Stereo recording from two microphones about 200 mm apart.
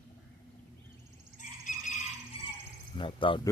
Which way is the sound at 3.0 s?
25° left (ahead or behind).